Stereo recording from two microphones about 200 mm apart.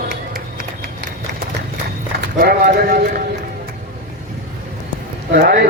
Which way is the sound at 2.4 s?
50° right (ahead or behind).